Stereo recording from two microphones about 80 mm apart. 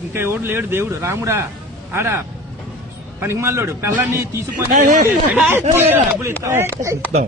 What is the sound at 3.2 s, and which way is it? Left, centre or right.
A man's voice, right.